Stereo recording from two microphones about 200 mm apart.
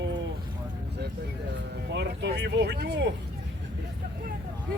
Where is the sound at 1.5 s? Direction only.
60° right (ahead or behind).